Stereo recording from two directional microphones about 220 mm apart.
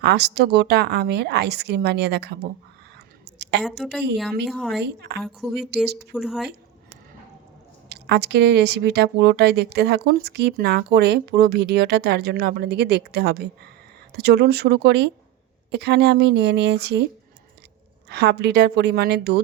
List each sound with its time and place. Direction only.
0.0 s speech: 50° right (ahead or behind)
3.3 s a sound: 50° right (ahead or behind)
3.6 s a woman's voice: centre (ahead or behind)
4.8 s speech: 45° right (ahead or behind)
5.2 s a woman's voice: centre (ahead or behind)
5.5 s speech: 50° right (ahead or behind)
6.1 s a woman's voice: centre (ahead or behind)
7.9 s speech: 50° right (ahead or behind)
18.1 s speech: 50° right (ahead or behind)